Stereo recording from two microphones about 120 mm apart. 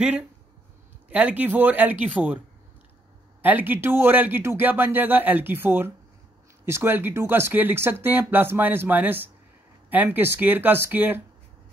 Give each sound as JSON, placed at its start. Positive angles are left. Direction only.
{"t": 1.1, "sound": "speech", "side_deg": -10}
{"t": 3.4, "sound": "speech", "side_deg": -15}